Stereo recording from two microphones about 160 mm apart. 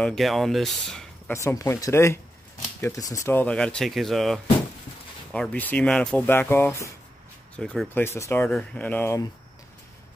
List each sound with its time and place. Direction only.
0.0 s speech: centre (ahead or behind)
1.3 s speech: 20° left (ahead or behind)
7.5 s speech: 5° left (ahead or behind)
8.0 s speech: 15° left (ahead or behind)